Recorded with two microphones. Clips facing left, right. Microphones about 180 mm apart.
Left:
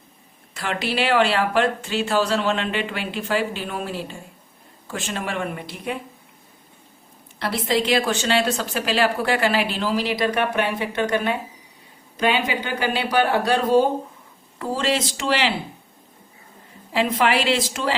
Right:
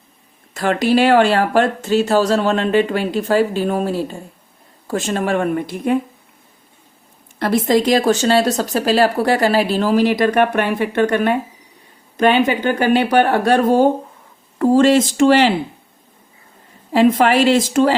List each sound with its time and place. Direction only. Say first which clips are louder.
0.5 s speech: right 10 dB; 45° right (ahead or behind)
7.3 s speech: right 7 dB; 50° right (ahead or behind)
16.9 s speech: right 7 dB; 45° right (ahead or behind)